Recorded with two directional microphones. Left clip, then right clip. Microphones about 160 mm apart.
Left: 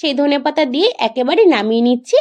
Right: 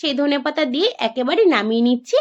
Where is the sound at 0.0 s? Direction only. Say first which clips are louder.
Left 4 dB; 20° left (ahead or behind).